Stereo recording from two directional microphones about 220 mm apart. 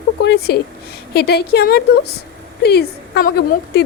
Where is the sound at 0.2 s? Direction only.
50° left (ahead or behind).